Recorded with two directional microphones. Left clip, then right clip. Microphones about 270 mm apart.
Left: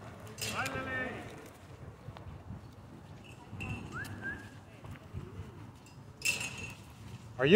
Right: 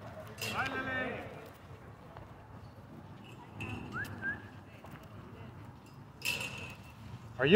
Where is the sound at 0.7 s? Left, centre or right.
Right.